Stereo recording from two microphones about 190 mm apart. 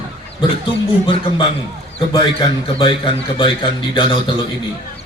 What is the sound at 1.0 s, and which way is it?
A man's voice, 25° left (ahead or behind).